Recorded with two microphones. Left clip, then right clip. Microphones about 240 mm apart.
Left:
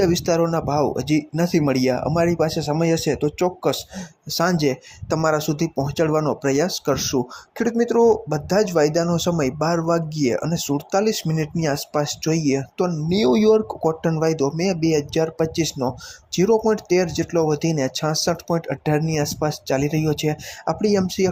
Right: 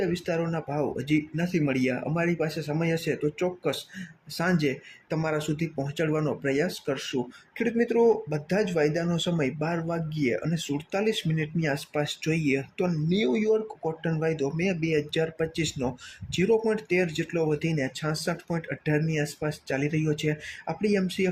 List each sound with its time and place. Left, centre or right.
0.0 s speech: centre
8.3 s speech: centre
13.1 s speech: left